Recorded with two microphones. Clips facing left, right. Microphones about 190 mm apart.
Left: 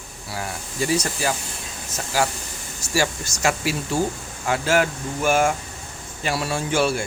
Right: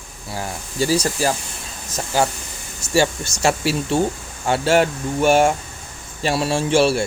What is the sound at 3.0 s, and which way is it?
Speech, 25° right (ahead or behind).